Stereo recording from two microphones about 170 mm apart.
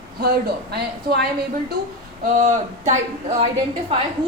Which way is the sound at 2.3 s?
45° right (ahead or behind).